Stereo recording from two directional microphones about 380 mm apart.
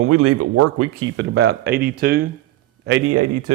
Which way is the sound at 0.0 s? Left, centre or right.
Right.